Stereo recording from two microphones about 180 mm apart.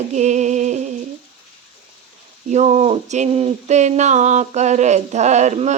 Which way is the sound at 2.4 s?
40° right (ahead or behind).